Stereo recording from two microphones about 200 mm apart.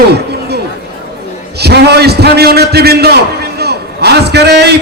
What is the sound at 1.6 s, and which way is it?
A man's voice, 55° right (ahead or behind).